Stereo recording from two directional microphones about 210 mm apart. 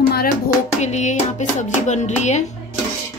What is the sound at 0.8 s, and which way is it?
Speech, 35° left (ahead or behind).